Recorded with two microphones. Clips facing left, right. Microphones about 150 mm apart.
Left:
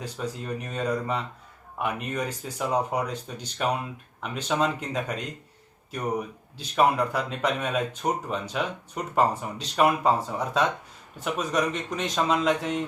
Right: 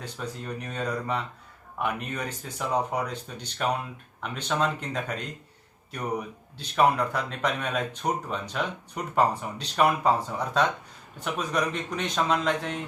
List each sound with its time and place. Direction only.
0.2 s speech: 5° left (ahead or behind)
4.4 s speech: 5° left (ahead or behind)